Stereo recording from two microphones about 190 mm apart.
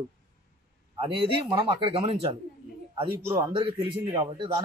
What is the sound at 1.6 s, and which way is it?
Speech, 30° right (ahead or behind).